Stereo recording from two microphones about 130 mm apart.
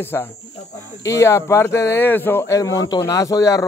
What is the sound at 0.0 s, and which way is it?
Speech, 15° left (ahead or behind).